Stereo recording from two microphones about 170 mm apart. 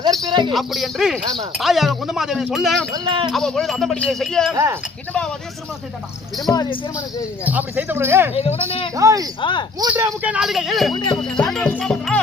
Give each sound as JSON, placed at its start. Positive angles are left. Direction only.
{"t": 0.0, "sound": "speech", "side_deg": -25}
{"t": 0.5, "sound": "speech", "side_deg": 0}
{"t": 2.9, "sound": "speech", "side_deg": -30}
{"t": 3.3, "sound": "speech", "side_deg": 5}
{"t": 4.5, "sound": "speech", "side_deg": -15}
{"t": 6.5, "sound": "speech", "side_deg": 25}
{"t": 7.4, "sound": "speech", "side_deg": -10}
{"t": 8.4, "sound": "speech", "side_deg": 35}
{"t": 9.0, "sound": "speech", "side_deg": -20}
{"t": 9.4, "sound": "speech", "side_deg": 25}
{"t": 9.9, "sound": "speech", "side_deg": -10}
{"t": 10.9, "sound": "speech", "side_deg": 25}
{"t": 11.2, "sound": "speech", "side_deg": 5}